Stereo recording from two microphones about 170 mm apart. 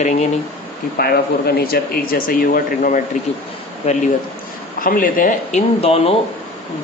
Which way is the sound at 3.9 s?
40° left (ahead or behind).